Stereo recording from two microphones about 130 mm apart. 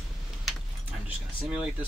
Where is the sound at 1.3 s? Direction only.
10° right (ahead or behind).